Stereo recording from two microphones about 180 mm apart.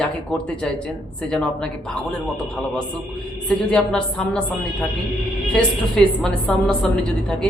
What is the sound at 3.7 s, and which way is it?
A woman's voice, 5° left (ahead or behind).